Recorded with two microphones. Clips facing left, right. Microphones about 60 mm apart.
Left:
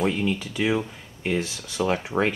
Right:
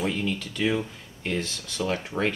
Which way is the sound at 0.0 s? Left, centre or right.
Centre.